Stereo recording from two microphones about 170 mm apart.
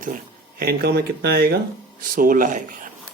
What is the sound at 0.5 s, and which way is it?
Speech, 65° right (ahead or behind).